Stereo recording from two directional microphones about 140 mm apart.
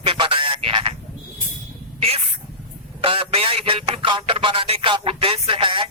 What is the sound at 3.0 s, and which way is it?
Music, 40° right (ahead or behind).